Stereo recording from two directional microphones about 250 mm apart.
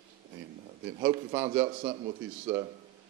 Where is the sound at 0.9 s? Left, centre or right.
Right.